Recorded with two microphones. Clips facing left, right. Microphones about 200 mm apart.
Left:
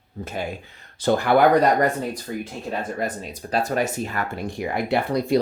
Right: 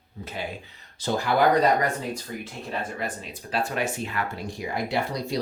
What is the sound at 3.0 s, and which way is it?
Speech, 40° left (ahead or behind).